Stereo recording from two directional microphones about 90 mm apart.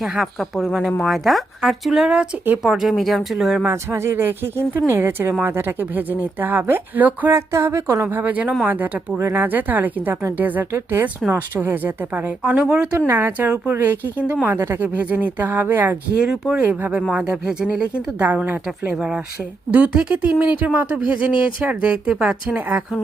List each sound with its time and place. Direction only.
0.0 s speech: centre (ahead or behind)
3.6 s speech: 30° right (ahead or behind)
7.3 s a woman's voice: 30° right (ahead or behind)
8.0 s speech: 20° right (ahead or behind)
13.1 s speech: 25° right (ahead or behind)
16.2 s speech: 10° right (ahead or behind)
16.6 s speech: 20° right (ahead or behind)